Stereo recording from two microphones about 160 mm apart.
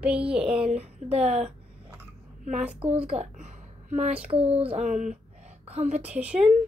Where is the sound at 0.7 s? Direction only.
40° right (ahead or behind).